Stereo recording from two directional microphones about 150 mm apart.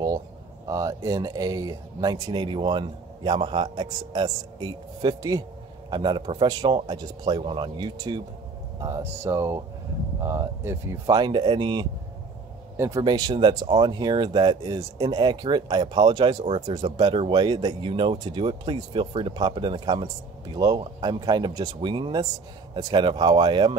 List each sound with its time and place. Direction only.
0.7 s speech: 25° right (ahead or behind)
8.8 s speech: 20° right (ahead or behind)
12.7 s speech: 20° right (ahead or behind)
13.0 s speech: 30° right (ahead or behind)